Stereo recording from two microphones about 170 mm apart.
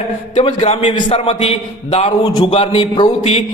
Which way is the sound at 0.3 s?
35° left (ahead or behind).